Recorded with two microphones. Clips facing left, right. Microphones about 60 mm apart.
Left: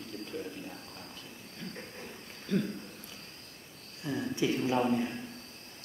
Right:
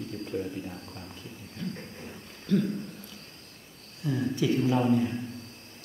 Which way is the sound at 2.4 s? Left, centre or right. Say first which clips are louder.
Right 5 dB; centre.